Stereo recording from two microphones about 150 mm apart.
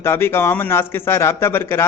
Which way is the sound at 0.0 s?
15° left (ahead or behind).